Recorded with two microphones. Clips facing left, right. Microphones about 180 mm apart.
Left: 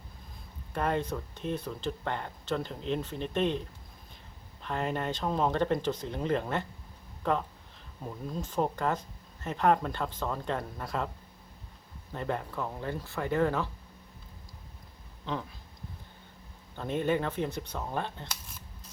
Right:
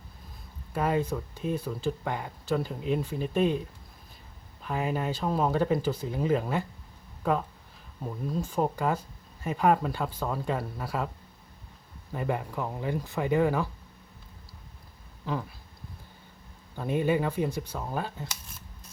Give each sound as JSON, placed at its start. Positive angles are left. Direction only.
{"t": 0.7, "sound": "speech", "side_deg": -5}
{"t": 4.6, "sound": "speech", "side_deg": -5}
{"t": 12.1, "sound": "speech", "side_deg": -10}
{"t": 15.2, "sound": "speech", "side_deg": -5}
{"t": 16.7, "sound": "speech", "side_deg": -10}